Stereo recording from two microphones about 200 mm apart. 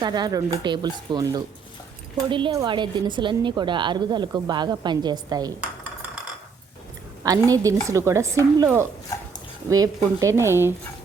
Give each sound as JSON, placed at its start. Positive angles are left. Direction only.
{"t": 0.0, "sound": "a woman's voice", "side_deg": -20}
{"t": 7.3, "sound": "speech", "side_deg": -15}